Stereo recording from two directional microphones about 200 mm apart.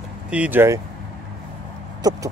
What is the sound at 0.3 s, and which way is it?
Speech, 10° right (ahead or behind).